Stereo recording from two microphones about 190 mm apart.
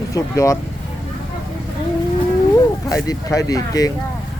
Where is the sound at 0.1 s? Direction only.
15° left (ahead or behind).